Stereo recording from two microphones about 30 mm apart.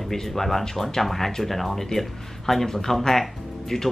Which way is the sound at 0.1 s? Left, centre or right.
Centre.